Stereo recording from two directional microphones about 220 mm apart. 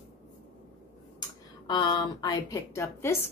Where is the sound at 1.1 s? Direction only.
20° left (ahead or behind).